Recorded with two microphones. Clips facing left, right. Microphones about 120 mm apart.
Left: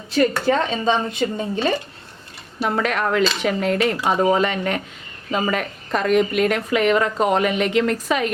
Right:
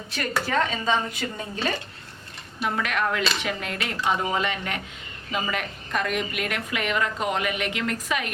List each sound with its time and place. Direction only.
0.4 s speech: 25° left (ahead or behind)
2.6 s a woman's voice: 40° left (ahead or behind)